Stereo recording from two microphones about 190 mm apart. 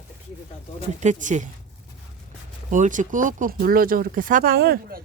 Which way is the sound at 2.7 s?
40° right (ahead or behind).